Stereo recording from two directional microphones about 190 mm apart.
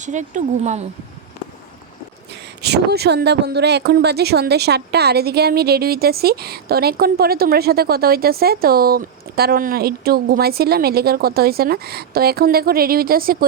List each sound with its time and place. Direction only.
0.0 s speech: 40° right (ahead or behind)
2.3 s speech: 60° right (ahead or behind)